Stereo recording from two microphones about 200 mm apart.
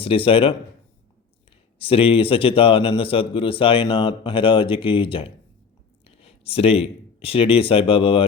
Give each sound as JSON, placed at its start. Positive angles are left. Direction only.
{"t": 0.0, "sound": "a man's voice", "side_deg": 25}
{"t": 1.8, "sound": "a man's voice", "side_deg": 25}